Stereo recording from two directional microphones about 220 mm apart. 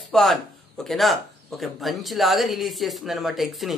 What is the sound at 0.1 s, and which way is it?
Speech, centre (ahead or behind).